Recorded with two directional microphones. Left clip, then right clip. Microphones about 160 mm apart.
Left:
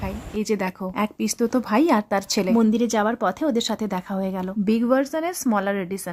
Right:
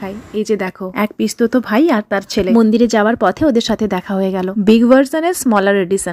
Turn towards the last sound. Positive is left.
turn(degrees=-30)  # may be behind; listen again after turning